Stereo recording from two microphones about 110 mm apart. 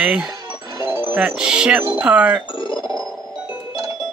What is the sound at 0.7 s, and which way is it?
Music, 25° right (ahead or behind).